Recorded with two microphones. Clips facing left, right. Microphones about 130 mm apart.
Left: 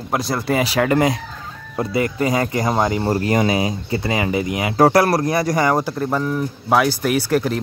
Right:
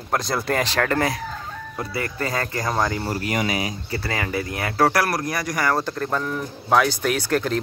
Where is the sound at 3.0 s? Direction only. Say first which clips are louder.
Left 7 dB; 35° left (ahead or behind); by 4.9 s 15° left (ahead or behind).